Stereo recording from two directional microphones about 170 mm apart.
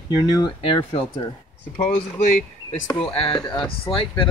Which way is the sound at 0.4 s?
30° left (ahead or behind).